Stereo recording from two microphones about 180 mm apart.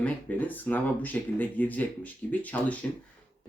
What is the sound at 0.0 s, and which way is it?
Speech, 10° left (ahead or behind).